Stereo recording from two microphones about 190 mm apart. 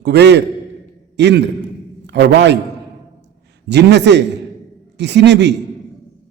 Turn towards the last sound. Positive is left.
turn(degrees=-65)  # may be behind; listen again after turning